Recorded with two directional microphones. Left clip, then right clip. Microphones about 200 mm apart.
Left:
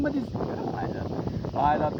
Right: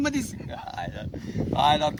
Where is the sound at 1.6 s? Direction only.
30° right (ahead or behind).